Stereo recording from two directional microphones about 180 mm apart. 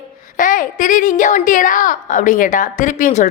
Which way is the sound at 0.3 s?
45° left (ahead or behind).